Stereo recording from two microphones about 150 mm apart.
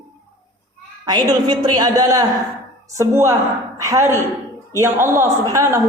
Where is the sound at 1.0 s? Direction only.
30° right (ahead or behind).